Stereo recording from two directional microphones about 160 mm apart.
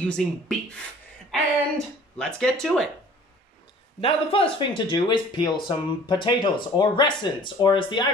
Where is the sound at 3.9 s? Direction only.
35° left (ahead or behind).